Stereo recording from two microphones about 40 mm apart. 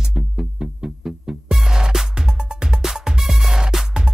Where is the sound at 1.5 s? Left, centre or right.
Centre.